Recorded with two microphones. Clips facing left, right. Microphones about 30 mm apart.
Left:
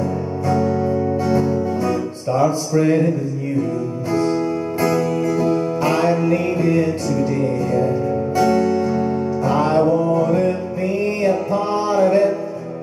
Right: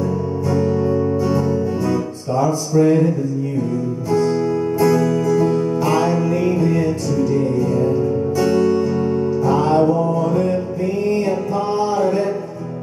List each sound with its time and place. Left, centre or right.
0.5 s music: centre
4.1 s music: centre
5.9 s music: left
7.1 s music: centre
9.4 s music: left
9.8 s music: centre